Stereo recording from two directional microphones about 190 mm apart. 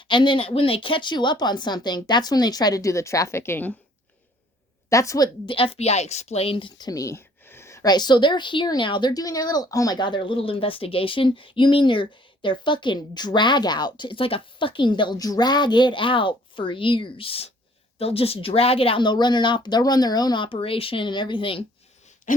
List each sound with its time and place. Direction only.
0.0 s a woman's voice: 25° left (ahead or behind)
4.9 s a woman's voice: 15° left (ahead or behind)